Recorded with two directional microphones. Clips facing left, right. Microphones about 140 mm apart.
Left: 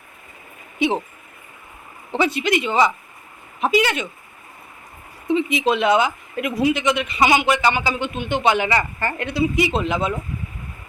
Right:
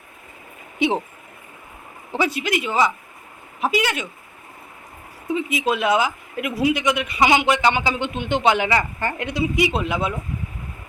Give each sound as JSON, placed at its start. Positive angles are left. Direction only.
{"t": 0.8, "sound": "speech", "side_deg": -15}
{"t": 2.1, "sound": "speech", "side_deg": -10}
{"t": 5.3, "sound": "speech", "side_deg": -5}